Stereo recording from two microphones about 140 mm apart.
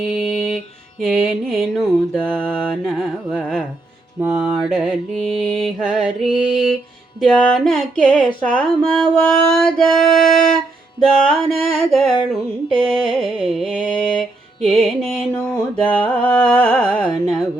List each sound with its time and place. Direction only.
0.0 s mantra: 5° right (ahead or behind)
4.2 s mantra: 15° right (ahead or behind)
4.6 s mantra: centre (ahead or behind)
15.7 s music: 5° left (ahead or behind)